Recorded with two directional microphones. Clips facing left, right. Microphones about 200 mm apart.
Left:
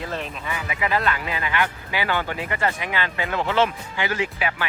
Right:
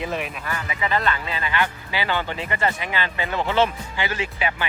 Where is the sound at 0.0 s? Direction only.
15° right (ahead or behind).